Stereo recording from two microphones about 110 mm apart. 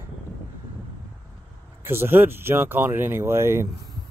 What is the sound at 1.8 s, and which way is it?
Speech, 20° right (ahead or behind).